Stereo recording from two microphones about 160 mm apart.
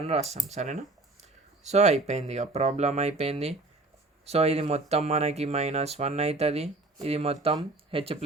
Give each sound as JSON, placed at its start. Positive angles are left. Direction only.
{"t": 0.0, "sound": "speech", "side_deg": -40}